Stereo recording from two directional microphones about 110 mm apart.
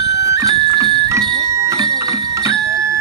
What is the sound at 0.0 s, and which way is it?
Music, 35° right (ahead or behind).